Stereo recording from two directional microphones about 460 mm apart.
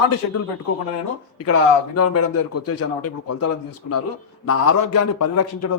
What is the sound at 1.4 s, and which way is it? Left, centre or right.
A man's voice, left.